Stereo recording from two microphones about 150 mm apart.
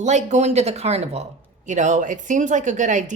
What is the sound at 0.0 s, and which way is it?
Speech, 50° right (ahead or behind).